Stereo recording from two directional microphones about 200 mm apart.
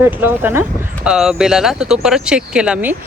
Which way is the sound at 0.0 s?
10° right (ahead or behind).